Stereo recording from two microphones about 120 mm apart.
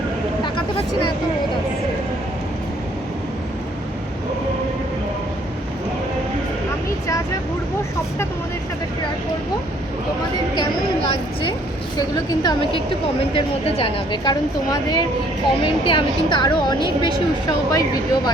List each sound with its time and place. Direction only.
11.9 s a woman's voice: 35° left (ahead or behind)
13.3 s a woman's voice: 50° left (ahead or behind); by 18.2 s 30° left (ahead or behind)